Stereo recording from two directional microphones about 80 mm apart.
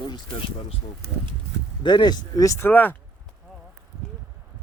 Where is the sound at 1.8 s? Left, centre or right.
Left.